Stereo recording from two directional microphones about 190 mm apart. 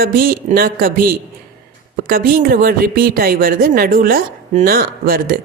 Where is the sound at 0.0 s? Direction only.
50° right (ahead or behind).